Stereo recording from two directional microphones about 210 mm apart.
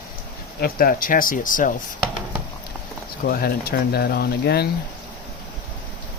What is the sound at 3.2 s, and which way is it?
Speech, 45° left (ahead or behind).